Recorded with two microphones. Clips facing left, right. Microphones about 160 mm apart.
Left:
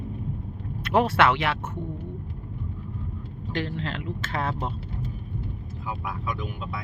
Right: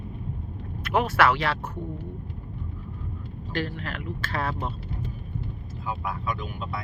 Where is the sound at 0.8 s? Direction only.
30° left (ahead or behind).